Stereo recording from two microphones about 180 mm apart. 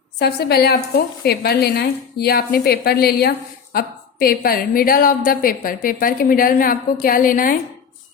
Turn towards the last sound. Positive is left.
turn(degrees=50)  # may be behind; listen again after turning